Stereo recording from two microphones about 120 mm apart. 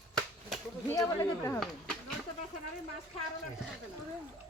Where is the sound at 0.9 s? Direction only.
25° left (ahead or behind).